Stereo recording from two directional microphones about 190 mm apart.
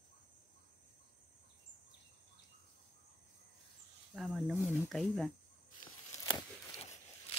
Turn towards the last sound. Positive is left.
turn(degrees=25)  # may be behind; listen again after turning